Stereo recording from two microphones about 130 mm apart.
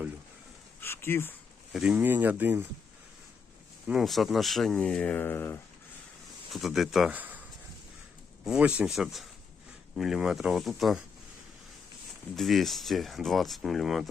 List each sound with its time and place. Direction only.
0.8 s speech: 20° left (ahead or behind)
1.7 s speech: 5° right (ahead or behind)
3.8 s speech: centre (ahead or behind); by 5.5 s 15° left (ahead or behind)
6.5 s speech: centre (ahead or behind)
7.1 s a sound: 15° right (ahead or behind)
8.4 s speech: 10° right (ahead or behind)
12.4 s speech: centre (ahead or behind)